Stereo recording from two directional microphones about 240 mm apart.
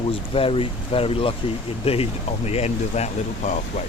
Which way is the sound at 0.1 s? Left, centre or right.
Left.